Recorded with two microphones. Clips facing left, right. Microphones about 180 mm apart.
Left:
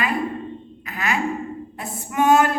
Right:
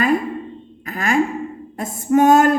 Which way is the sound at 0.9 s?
45° right (ahead or behind).